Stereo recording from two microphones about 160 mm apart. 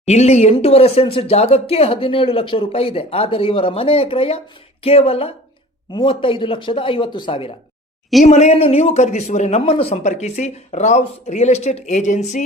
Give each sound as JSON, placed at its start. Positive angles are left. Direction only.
{"t": 0.0, "sound": "a man's voice", "side_deg": 45}